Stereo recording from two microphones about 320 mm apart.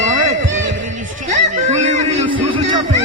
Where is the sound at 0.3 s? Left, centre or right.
Right.